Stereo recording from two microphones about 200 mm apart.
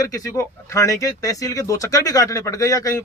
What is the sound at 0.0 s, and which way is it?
Speech, 15° left (ahead or behind).